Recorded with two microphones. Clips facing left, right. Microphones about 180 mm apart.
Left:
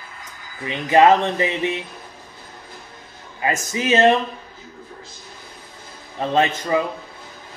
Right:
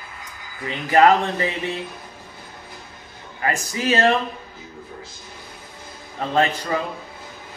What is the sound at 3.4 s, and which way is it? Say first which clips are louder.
Speech: left 1 dB; 20° left (ahead or behind).